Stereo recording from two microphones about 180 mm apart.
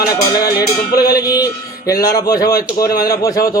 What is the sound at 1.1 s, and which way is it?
A man's voice, 20° left (ahead or behind).